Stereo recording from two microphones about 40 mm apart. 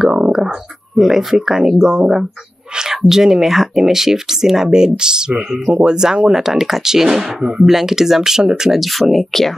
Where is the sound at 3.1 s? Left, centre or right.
Centre.